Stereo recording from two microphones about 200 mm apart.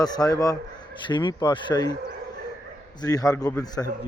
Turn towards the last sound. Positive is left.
turn(degrees=20)  # may be behind; listen again after turning